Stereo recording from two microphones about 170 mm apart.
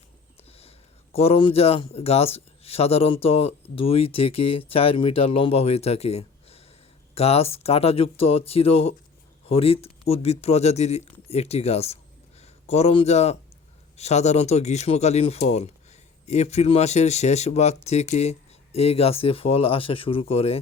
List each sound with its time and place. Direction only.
1.1 s speech: 35° left (ahead or behind)